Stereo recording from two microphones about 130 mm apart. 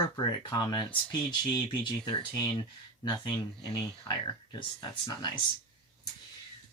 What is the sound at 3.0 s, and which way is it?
Speech, 35° left (ahead or behind).